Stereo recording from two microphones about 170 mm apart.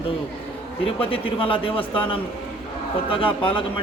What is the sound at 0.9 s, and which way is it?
Speech, 30° left (ahead or behind).